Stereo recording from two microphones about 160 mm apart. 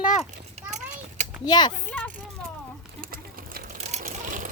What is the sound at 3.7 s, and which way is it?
Vehicle, 45° right (ahead or behind).